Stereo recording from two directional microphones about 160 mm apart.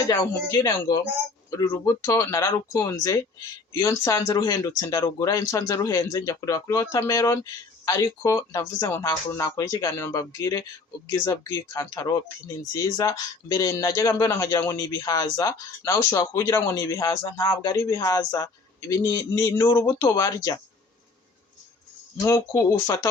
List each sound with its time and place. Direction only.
0.1 s speech: 25° left (ahead or behind)
22.3 s speech: 15° left (ahead or behind)